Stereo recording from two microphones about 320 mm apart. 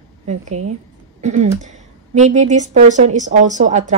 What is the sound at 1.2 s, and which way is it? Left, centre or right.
A woman's voice, right.